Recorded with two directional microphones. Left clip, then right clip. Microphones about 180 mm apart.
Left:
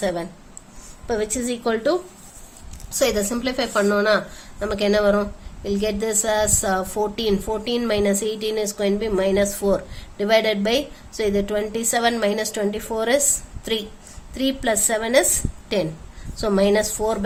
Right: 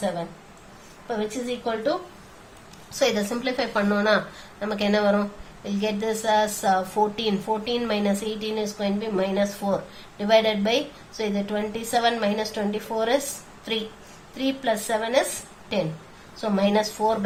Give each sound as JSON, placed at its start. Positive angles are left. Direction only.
{"t": 1.0, "sound": "a woman's voice", "side_deg": 65}
{"t": 2.9, "sound": "a woman's voice", "side_deg": 40}